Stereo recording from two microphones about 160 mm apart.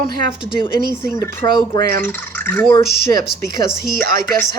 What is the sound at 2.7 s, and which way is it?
Speech, 25° left (ahead or behind).